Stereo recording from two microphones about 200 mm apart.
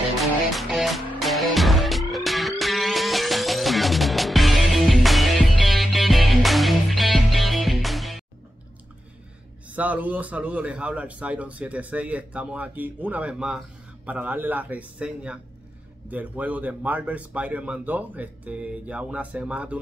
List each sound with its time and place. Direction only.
0.2 s music: centre (ahead or behind)
9.7 s speech: 10° right (ahead or behind)